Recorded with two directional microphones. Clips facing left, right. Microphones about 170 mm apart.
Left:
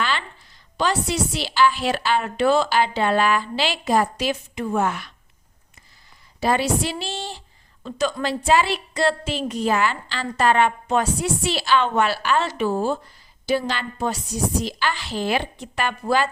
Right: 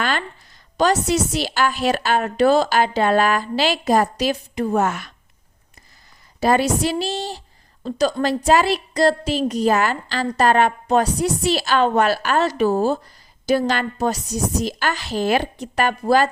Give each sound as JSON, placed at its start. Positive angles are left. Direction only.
{"t": 0.0, "sound": "a sound", "side_deg": -50}
{"t": 0.8, "sound": "a woman's voice", "side_deg": -45}
{"t": 6.4, "sound": "a woman's voice", "side_deg": -45}